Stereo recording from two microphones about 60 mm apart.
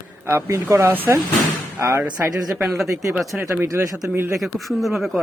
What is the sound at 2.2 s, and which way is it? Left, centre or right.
Speech, right.